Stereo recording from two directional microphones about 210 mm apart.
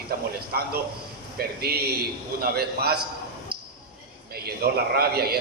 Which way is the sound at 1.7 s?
45° right (ahead or behind).